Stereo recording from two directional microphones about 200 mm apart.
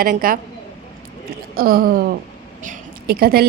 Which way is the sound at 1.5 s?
50° right (ahead or behind).